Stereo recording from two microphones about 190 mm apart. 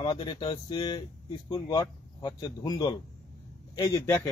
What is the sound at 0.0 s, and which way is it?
A man's voice, 25° left (ahead or behind).